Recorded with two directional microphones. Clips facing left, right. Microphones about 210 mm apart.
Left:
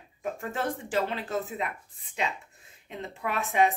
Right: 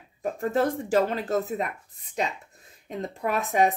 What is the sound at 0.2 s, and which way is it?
A woman's voice, 40° right (ahead or behind).